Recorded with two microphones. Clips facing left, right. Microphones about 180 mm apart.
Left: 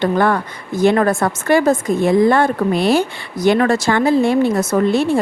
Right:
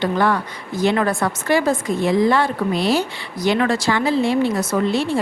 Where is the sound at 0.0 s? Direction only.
50° left (ahead or behind).